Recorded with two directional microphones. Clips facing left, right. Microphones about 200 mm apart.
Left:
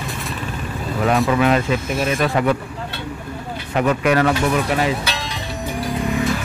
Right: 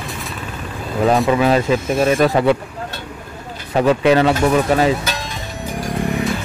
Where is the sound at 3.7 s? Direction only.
30° right (ahead or behind).